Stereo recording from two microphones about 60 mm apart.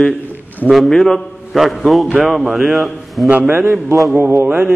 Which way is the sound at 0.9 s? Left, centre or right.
Centre.